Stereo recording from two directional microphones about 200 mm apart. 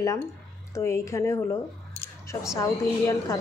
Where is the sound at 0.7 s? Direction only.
15° left (ahead or behind).